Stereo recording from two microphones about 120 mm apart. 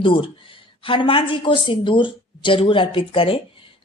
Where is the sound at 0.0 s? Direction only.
45° left (ahead or behind).